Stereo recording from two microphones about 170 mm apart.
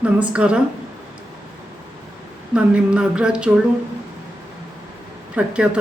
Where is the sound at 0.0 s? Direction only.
5° right (ahead or behind).